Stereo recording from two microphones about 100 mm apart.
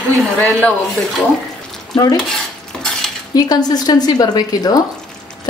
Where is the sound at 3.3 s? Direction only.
40° left (ahead or behind).